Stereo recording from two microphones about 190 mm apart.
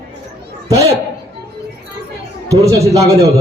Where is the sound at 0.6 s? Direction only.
15° right (ahead or behind).